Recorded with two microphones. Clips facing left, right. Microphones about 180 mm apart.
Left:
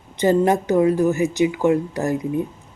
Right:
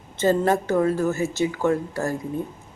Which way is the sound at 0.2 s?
15° left (ahead or behind).